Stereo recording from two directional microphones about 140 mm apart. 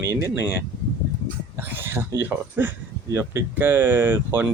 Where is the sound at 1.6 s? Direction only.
15° right (ahead or behind).